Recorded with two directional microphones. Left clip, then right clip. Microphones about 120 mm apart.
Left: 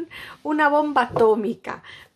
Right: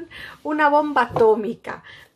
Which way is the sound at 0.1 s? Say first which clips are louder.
Right 2 dB; 20° left (ahead or behind).